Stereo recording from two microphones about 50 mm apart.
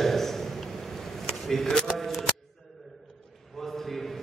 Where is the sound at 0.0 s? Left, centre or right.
Centre.